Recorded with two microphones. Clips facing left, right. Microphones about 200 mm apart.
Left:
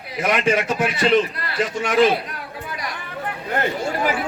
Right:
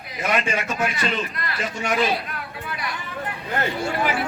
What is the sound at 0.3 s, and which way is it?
Speech, 90° left.